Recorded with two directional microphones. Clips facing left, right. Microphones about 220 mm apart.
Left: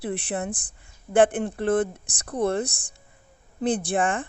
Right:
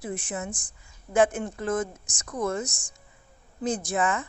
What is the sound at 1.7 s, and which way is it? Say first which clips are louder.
Speech: left 6 dB; 35° left (ahead or behind).